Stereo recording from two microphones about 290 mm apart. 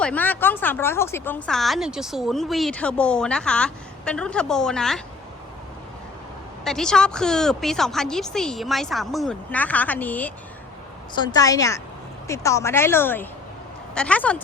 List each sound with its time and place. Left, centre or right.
0.0 s speech: centre
6.7 s speech: centre